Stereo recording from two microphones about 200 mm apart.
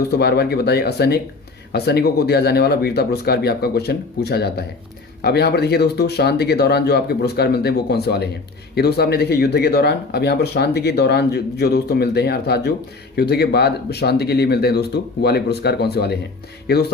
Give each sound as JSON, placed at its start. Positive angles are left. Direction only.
{"t": 0.1, "sound": "speech", "side_deg": 55}